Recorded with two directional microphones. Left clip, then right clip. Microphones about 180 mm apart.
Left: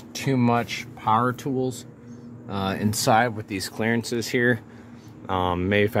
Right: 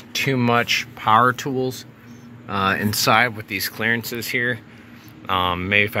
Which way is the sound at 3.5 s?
25° left (ahead or behind).